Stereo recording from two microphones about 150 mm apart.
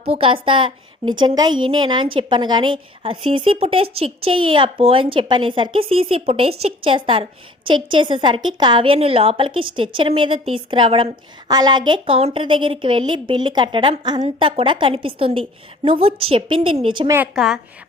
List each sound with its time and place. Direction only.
0.0 s a woman's voice: 35° right (ahead or behind)
17.3 s a woman's voice: centre (ahead or behind)